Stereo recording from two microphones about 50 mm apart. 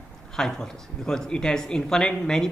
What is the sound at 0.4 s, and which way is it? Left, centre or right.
Speech, centre.